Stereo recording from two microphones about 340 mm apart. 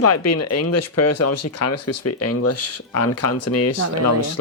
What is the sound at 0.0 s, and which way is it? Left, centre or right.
Speech, left.